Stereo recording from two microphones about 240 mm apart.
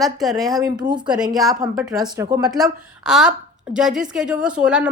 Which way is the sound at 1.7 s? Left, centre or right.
Centre.